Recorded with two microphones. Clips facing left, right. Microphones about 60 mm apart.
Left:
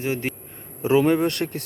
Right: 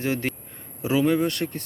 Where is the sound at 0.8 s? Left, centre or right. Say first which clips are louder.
Left 3 dB; left.